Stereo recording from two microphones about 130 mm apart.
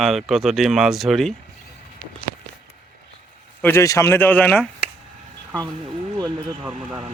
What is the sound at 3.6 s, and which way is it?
Speech, 20° left (ahead or behind).